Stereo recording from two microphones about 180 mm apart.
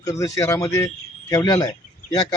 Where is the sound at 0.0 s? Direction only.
20° left (ahead or behind).